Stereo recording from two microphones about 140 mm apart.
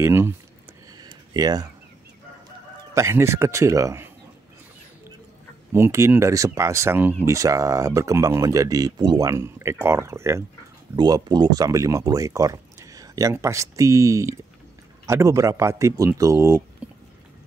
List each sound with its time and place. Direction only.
0.0 s speech: 20° right (ahead or behind)
0.9 s a sound: 30° right (ahead or behind)
2.9 s speech: 20° right (ahead or behind)
5.7 s speech: 20° right (ahead or behind)